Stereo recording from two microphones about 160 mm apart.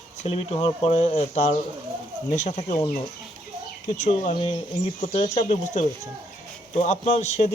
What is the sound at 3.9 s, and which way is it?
Speech, 45° left (ahead or behind).